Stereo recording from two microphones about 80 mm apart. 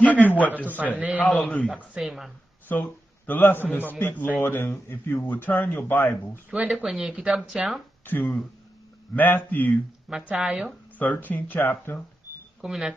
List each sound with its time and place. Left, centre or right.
0.0 s a sound: left
0.7 s a man's voice: right
1.2 s speech: centre
2.0 s speech: centre
2.7 s a man's voice: left
6.3 s a man's voice: right
6.7 s speech: centre
8.0 s speech: left
10.0 s speech: centre
11.0 s speech: left
12.6 s speech: centre